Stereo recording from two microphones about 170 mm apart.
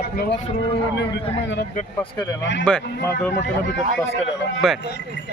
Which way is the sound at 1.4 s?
90° left.